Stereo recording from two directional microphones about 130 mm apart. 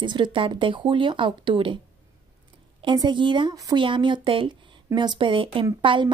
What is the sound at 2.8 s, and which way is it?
Speech, 35° right (ahead or behind).